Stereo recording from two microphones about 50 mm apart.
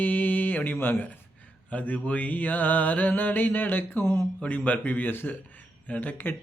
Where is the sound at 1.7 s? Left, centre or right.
Left.